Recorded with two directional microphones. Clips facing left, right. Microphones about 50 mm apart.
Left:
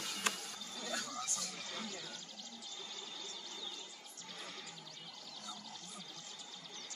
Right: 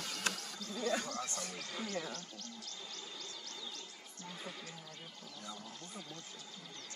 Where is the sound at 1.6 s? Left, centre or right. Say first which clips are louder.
Right 2 dB; centre.